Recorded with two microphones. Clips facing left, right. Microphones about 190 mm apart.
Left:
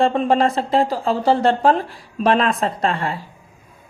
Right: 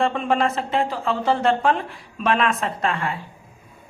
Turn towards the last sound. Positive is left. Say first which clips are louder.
# left 3 dB
turn(degrees=35)  # may be behind; listen again after turning